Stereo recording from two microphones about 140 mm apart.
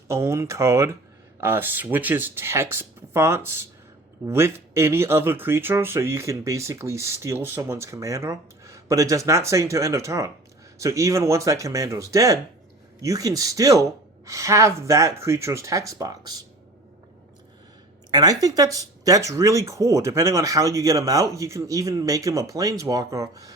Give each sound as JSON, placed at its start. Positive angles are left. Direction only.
{"t": 0.1, "sound": "speech", "side_deg": -20}
{"t": 18.1, "sound": "speech", "side_deg": -25}